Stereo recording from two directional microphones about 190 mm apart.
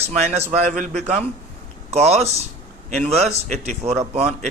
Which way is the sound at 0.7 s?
40° right (ahead or behind).